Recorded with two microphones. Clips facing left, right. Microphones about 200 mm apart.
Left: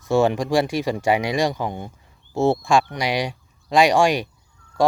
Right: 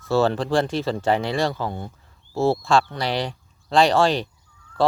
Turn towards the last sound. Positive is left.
turn(degrees=15)  # may be behind; listen again after turning